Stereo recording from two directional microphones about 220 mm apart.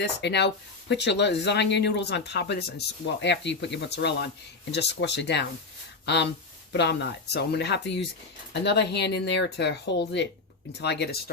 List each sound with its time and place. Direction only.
0.0 s speech: 50° left (ahead or behind)
6.7 s speech: 50° left (ahead or behind)